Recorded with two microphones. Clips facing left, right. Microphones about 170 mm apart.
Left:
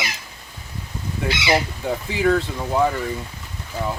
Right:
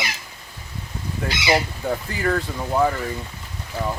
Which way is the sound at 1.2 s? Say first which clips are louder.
Left 1 dB; 5° left (ahead or behind).